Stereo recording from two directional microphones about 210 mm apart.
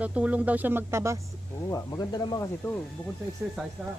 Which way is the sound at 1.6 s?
15° left (ahead or behind).